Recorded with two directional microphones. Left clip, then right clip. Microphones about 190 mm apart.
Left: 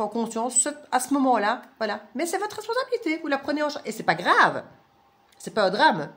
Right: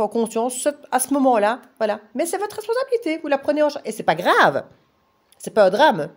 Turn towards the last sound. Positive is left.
turn(degrees=-50)  # may be behind; listen again after turning